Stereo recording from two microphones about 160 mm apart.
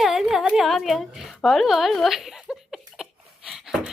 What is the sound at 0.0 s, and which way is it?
A woman's voice, centre (ahead or behind).